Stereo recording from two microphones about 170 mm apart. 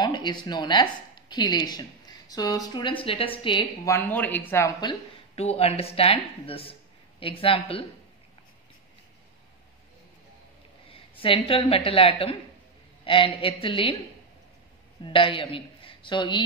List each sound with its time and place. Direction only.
0.0 s speech: 25° left (ahead or behind)
3.8 s speech: 15° left (ahead or behind)
5.3 s speech: 35° left (ahead or behind)
10.9 s a man's voice: 30° left (ahead or behind)
15.0 s a man's voice: 30° left (ahead or behind)